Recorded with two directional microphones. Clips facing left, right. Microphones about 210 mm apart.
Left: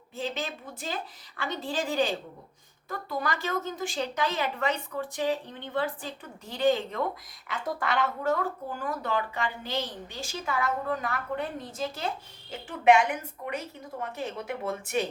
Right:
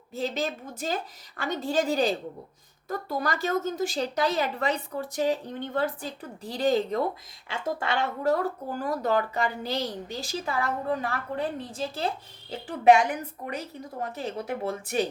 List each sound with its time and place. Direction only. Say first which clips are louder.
0.2 s a woman's voice: right 4 dB; 40° right (ahead or behind)
7.4 s a woman's voice: right 2 dB; 25° right (ahead or behind)